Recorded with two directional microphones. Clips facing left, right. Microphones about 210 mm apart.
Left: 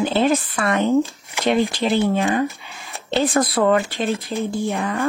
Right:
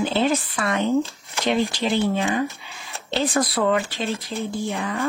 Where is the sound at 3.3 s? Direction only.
50° left (ahead or behind).